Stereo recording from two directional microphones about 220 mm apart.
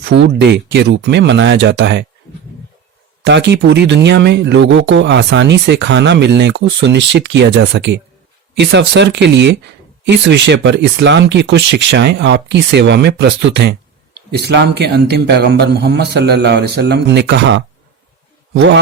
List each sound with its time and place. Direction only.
0.0 s speech: 50° right (ahead or behind)
3.2 s speech: 55° right (ahead or behind)